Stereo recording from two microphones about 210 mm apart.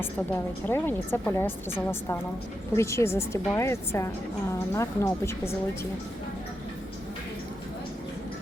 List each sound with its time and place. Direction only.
0.7 s a woman's voice: 10° left (ahead or behind)